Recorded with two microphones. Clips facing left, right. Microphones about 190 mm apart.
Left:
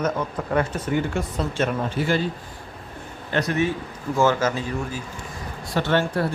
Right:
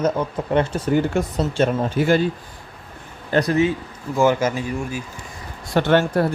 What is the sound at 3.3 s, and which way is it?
Speech, 35° right (ahead or behind).